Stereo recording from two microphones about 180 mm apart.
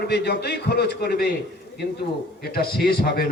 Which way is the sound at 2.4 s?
60° left (ahead or behind).